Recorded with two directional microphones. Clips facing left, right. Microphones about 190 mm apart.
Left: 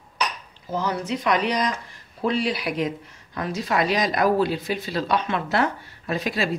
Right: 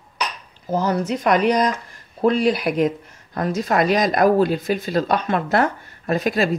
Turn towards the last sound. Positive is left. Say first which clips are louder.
# right 5 dB
turn(degrees=-45)  # may be behind; listen again after turning